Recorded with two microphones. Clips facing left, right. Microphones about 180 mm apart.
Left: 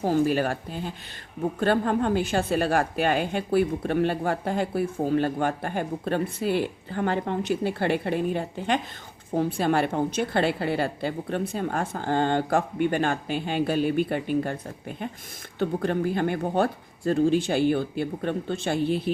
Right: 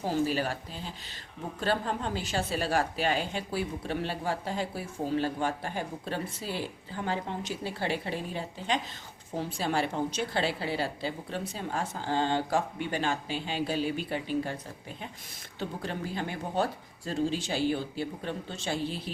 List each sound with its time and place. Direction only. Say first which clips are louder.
0.0 s a woman's voice: left 6 dB; 50° left (ahead or behind)